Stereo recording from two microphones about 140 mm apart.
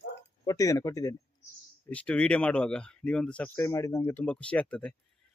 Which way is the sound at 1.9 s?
10° left (ahead or behind).